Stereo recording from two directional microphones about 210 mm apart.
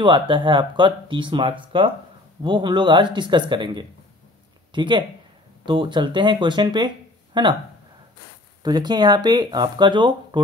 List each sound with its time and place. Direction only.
0.0 s speech: 20° right (ahead or behind)
8.6 s speech: 20° right (ahead or behind)